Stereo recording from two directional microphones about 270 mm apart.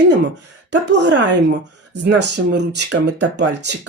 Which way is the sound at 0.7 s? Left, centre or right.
Right.